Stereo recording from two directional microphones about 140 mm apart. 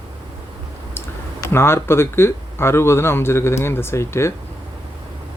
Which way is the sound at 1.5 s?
15° left (ahead or behind).